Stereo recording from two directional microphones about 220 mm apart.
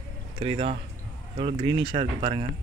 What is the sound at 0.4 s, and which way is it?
Speech, 25° right (ahead or behind).